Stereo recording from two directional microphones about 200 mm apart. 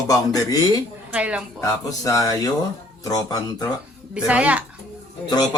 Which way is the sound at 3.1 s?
20° left (ahead or behind).